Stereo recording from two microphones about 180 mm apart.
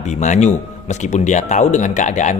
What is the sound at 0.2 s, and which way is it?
Speech, 40° left (ahead or behind).